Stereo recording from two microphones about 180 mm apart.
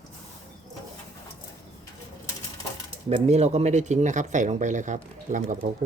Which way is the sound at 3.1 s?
40° right (ahead or behind).